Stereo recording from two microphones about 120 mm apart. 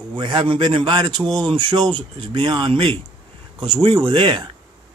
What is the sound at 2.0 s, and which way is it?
Speech, 45° right (ahead or behind).